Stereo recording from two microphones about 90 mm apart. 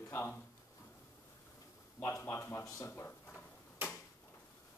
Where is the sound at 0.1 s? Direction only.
25° left (ahead or behind).